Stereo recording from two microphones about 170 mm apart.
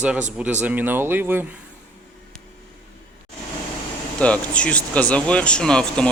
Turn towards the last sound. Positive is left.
turn(degrees=5)  # may be behind; listen again after turning